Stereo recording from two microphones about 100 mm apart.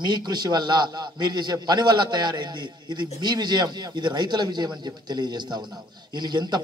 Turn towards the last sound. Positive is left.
turn(degrees=-45)  # may be behind; listen again after turning